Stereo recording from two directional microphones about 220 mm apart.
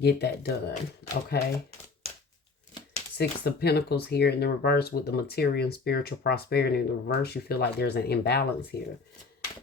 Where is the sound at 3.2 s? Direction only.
45° left (ahead or behind).